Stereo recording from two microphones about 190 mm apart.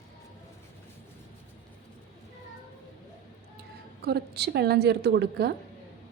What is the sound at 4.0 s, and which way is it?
A woman's voice, 60° right (ahead or behind).